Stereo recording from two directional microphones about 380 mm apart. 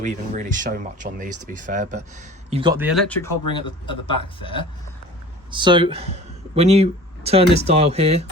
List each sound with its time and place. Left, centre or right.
0.0 s speech: centre
3.5 s speech: centre
5.5 s speech: centre